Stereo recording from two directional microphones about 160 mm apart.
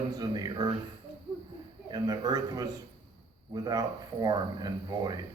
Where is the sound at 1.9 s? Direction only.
25° right (ahead or behind).